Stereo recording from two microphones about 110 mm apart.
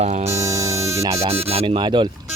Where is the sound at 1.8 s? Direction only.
45° right (ahead or behind).